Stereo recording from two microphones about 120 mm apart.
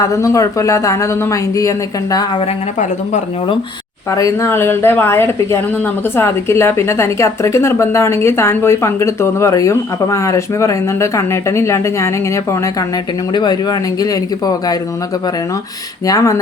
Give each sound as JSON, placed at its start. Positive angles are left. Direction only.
{"t": 0.1, "sound": "a woman's voice", "side_deg": 25}
{"t": 4.1, "sound": "a woman's voice", "side_deg": 25}
{"t": 13.3, "sound": "speech", "side_deg": 35}
{"t": 16.0, "sound": "a woman's voice", "side_deg": 25}